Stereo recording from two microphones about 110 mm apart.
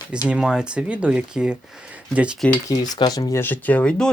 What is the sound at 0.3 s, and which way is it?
Speech, 10° right (ahead or behind).